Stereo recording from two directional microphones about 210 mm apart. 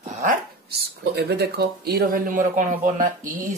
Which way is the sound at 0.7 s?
50° right (ahead or behind).